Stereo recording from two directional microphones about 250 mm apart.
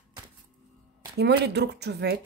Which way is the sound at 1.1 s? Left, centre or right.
Right.